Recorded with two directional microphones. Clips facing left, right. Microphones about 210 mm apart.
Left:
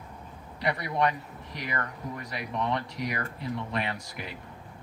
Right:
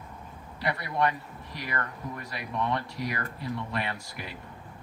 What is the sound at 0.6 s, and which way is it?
Speech, 20° left (ahead or behind).